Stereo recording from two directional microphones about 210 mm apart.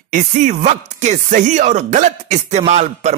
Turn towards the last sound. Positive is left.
turn(degrees=-35)  # may be behind; listen again after turning